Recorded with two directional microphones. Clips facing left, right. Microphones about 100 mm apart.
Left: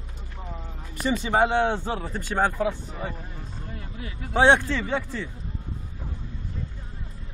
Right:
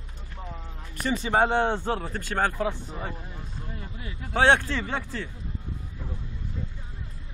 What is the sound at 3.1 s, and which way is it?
Vehicle, 5° right (ahead or behind).